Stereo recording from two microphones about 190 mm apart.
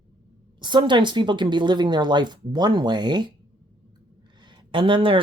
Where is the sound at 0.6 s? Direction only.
25° right (ahead or behind).